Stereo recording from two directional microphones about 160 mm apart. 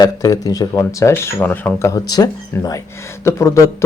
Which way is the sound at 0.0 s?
20° left (ahead or behind).